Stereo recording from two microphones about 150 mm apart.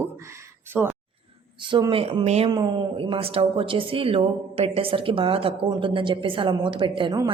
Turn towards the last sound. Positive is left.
turn(degrees=-35)  # may be behind; listen again after turning